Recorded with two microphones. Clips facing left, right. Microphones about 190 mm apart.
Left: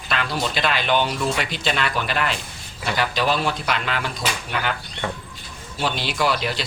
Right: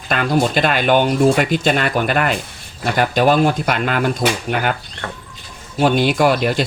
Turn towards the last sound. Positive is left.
turn(degrees=-50)  # may be behind; listen again after turning